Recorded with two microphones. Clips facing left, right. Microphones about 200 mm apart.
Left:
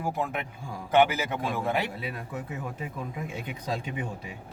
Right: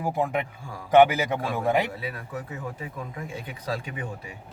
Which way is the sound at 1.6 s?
15° right (ahead or behind).